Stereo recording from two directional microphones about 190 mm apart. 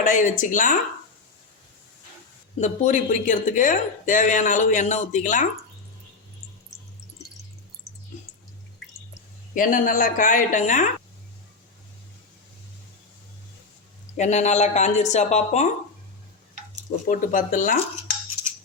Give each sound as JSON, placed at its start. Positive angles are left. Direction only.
{"t": 0.0, "sound": "a woman's voice", "side_deg": 40}
{"t": 2.6, "sound": "speech", "side_deg": 40}
{"t": 9.6, "sound": "a woman's voice", "side_deg": 45}
{"t": 14.2, "sound": "speech", "side_deg": 35}
{"t": 17.1, "sound": "a woman's voice", "side_deg": 45}